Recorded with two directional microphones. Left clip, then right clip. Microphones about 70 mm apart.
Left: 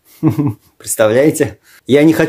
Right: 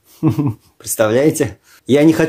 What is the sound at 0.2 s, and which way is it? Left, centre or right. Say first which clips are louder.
Speech: left 2 dB; left.